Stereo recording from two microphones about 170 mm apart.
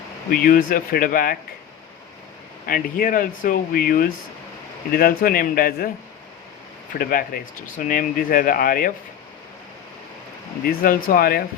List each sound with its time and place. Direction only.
0.3 s speech: 55° left (ahead or behind)
2.6 s speech: 55° left (ahead or behind)
7.0 s speech: 60° left (ahead or behind)
10.7 s speech: 60° left (ahead or behind)